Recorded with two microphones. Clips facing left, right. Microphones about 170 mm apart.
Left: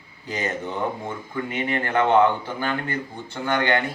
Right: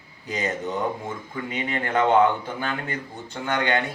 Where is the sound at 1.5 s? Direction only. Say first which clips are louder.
Left 1 dB; 15° right (ahead or behind).